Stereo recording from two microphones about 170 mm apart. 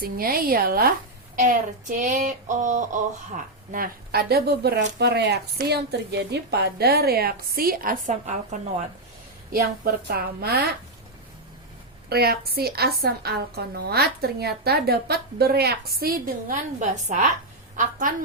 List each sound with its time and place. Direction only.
0.0 s a woman's voice: 60° right (ahead or behind)
1.4 s a sound: 45° right (ahead or behind); by 4.8 s 70° right (ahead or behind)
4.9 s a woman's voice: 75° right (ahead or behind); by 8.5 s 45° right (ahead or behind)
9.5 s a woman's voice: 60° right (ahead or behind)
12.0 s a woman's voice: 70° right (ahead or behind); by 17.2 s 50° right (ahead or behind)